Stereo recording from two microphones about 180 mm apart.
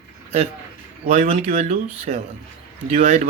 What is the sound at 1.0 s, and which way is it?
Speech, 40° right (ahead or behind).